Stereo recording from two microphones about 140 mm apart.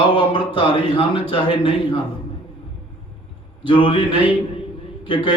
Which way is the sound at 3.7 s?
35° left (ahead or behind).